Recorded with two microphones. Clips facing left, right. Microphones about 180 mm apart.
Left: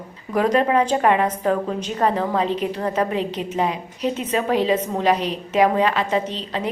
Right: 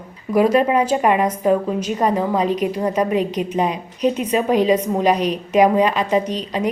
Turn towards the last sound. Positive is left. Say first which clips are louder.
# right 4 dB
turn(degrees=-15)  # may be behind; listen again after turning